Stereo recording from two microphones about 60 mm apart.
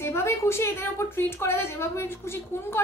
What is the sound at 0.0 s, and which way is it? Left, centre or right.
A woman's voice, left.